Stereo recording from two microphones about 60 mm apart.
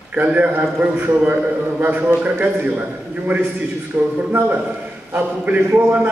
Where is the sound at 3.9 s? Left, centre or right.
Right.